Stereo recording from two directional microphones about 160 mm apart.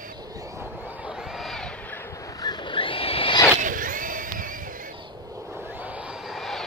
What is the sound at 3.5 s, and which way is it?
Crowd, 55° right (ahead or behind).